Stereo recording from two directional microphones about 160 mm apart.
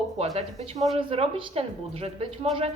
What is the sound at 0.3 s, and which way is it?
A woman's voice, 40° right (ahead or behind).